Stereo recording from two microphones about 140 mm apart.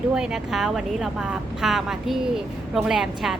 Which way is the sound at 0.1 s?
5° right (ahead or behind).